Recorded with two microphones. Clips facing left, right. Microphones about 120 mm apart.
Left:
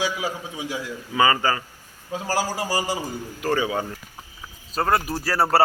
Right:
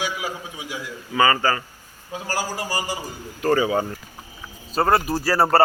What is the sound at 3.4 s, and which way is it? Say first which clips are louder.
Speech: right 4 dB; centre (ahead or behind).